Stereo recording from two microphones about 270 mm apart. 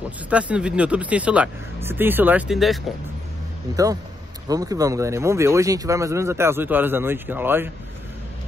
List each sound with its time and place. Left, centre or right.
0.3 s speech: centre
3.7 s speech: centre